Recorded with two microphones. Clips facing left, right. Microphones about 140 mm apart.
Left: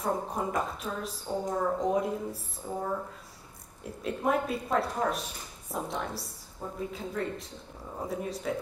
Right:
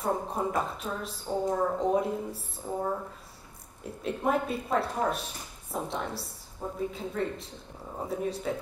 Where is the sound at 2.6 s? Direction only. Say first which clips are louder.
Right 2 dB; 45° right (ahead or behind).